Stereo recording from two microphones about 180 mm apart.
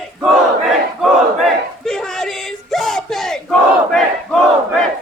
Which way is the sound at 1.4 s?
Centre (ahead or behind).